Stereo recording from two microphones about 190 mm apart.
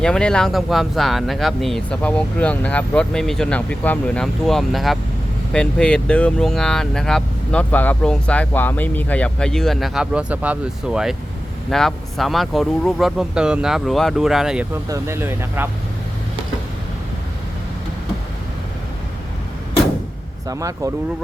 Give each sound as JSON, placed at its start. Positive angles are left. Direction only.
{"t": 0.0, "sound": "speech", "side_deg": 5}
{"t": 14.8, "sound": "speech", "side_deg": -15}
{"t": 20.5, "sound": "speech", "side_deg": -15}